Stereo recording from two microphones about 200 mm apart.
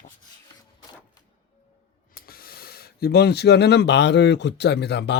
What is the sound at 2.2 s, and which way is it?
Speech, 50° left (ahead or behind).